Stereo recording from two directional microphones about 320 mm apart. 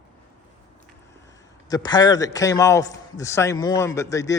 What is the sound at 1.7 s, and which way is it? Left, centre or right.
A man's voice, centre.